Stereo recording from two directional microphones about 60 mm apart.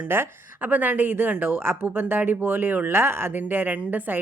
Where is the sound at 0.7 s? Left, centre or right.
Right.